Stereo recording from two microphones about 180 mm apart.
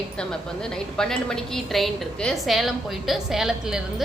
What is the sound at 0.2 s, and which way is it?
A woman's voice, 5° left (ahead or behind).